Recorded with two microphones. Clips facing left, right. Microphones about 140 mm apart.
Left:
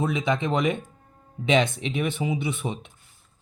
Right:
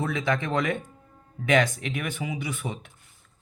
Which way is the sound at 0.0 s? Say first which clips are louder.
Left 2 dB; 20° left (ahead or behind).